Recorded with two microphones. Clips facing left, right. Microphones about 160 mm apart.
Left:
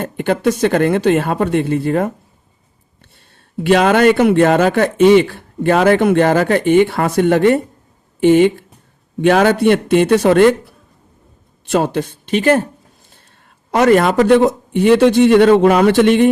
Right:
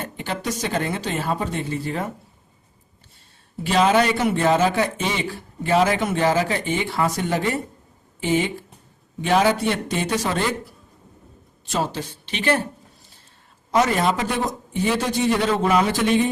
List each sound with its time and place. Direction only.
0.0 s speech: 55° left (ahead or behind)
3.6 s a man's voice: 70° left (ahead or behind); by 12.6 s 45° left (ahead or behind)
13.7 s a man's voice: 65° left (ahead or behind)